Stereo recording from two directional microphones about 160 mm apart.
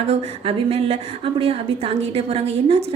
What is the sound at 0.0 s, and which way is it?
A woman's voice, 40° right (ahead or behind).